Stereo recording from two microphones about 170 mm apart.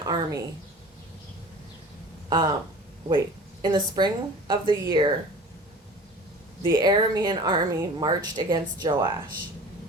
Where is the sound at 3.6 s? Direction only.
25° right (ahead or behind).